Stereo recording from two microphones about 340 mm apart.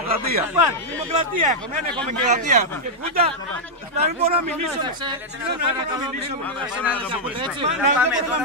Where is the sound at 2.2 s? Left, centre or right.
Right.